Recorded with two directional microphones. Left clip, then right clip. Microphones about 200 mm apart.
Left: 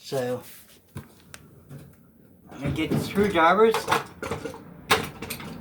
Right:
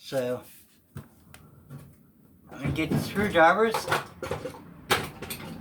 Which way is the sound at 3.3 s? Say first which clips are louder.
Left 1 dB; centre (ahead or behind).